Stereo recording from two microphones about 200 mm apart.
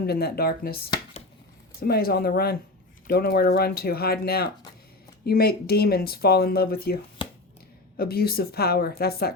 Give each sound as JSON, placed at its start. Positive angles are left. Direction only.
{"t": 0.0, "sound": "speech", "side_deg": 50}
{"t": 7.9, "sound": "speech", "side_deg": 50}